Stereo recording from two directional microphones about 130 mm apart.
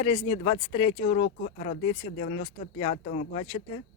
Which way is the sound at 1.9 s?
65° left (ahead or behind).